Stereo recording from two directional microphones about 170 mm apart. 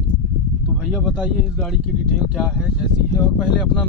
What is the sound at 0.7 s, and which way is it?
Speech, 5° right (ahead or behind).